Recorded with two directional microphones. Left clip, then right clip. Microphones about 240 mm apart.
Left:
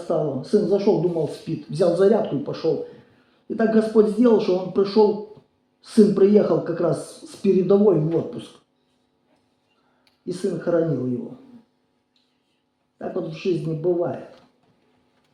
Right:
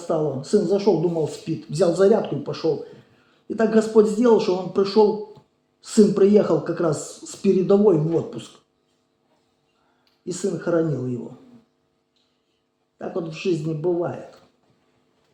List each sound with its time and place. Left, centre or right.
0.1 s speech: right
10.2 s speech: right
13.0 s speech: right